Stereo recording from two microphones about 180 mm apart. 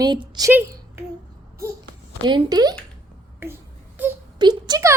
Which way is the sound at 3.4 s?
10° right (ahead or behind).